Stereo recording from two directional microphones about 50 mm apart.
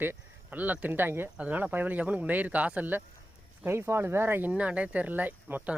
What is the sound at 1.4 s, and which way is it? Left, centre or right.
Speech, right.